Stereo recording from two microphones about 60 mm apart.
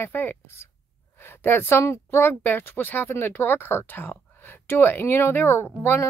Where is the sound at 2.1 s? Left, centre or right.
Left.